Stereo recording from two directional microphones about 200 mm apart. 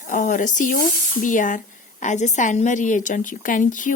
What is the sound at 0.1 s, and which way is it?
Speech, 40° left (ahead or behind).